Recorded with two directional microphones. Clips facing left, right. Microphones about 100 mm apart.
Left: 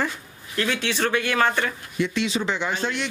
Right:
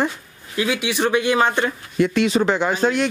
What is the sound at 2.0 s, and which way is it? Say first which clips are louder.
Speech: right 7 dB; 50° right (ahead or behind).